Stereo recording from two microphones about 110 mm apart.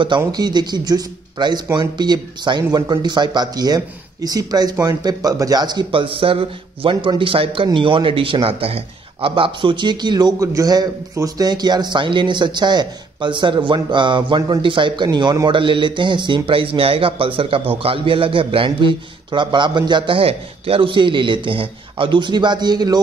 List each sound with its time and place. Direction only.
0.3 s a man's voice: 40° right (ahead or behind)